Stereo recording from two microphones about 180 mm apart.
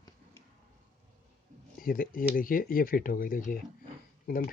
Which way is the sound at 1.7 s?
55° left (ahead or behind).